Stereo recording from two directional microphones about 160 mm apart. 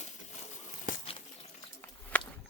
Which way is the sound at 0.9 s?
55° left (ahead or behind).